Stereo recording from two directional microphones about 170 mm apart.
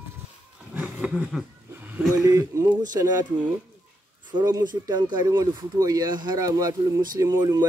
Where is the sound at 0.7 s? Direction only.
5° right (ahead or behind).